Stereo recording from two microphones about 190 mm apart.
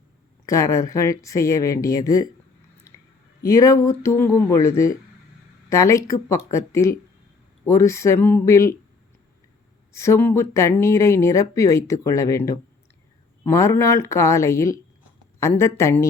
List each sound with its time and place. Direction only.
0.4 s speech: 15° left (ahead or behind)
3.4 s speech: 15° left (ahead or behind)
9.9 s speech: 15° left (ahead or behind)